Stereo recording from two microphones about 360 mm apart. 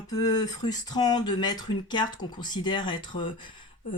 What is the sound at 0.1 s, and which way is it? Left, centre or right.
Speech, centre.